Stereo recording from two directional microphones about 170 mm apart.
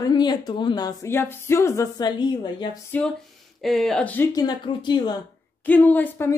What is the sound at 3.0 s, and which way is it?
Speech, 10° left (ahead or behind).